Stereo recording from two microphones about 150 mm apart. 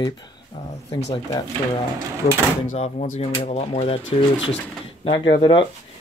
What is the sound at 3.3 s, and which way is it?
Speech, 40° left (ahead or behind).